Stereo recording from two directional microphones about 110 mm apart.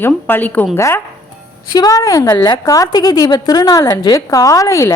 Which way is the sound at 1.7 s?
35° left (ahead or behind).